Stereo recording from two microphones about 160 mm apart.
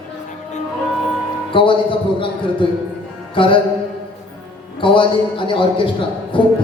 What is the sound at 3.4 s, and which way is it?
Speech, 30° left (ahead or behind).